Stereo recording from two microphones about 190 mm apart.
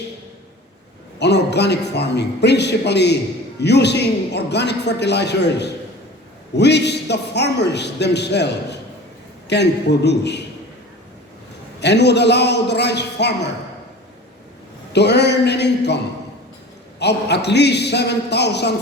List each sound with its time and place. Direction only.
1.2 s a man's voice: 65° left (ahead or behind)
11.8 s a man's voice: 65° left (ahead or behind)
14.9 s a man's voice: 65° left (ahead or behind)
17.0 s a man's voice: 60° left (ahead or behind)